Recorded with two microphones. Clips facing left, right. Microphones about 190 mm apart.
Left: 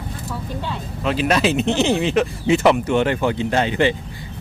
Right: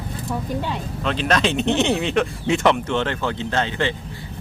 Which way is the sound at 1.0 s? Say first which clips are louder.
Left 3 dB; 5° left (ahead or behind).